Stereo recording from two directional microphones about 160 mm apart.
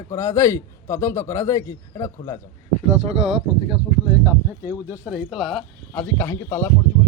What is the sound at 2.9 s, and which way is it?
Speech, 40° right (ahead or behind).